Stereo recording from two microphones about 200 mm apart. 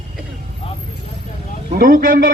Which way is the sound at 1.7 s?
45° right (ahead or behind).